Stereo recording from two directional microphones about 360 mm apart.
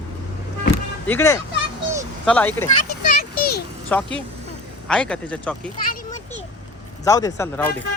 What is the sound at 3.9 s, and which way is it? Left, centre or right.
Speech, centre.